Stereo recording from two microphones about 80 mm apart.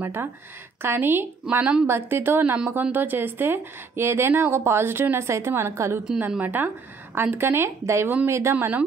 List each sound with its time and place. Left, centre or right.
0.0 s a woman's voice: right
6.1 s a woman's voice: right